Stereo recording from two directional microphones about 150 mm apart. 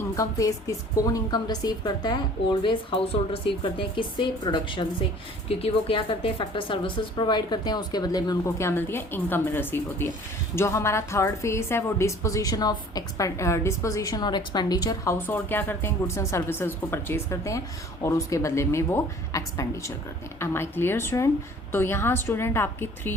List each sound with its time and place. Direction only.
0.0 s a woman's voice: 20° left (ahead or behind)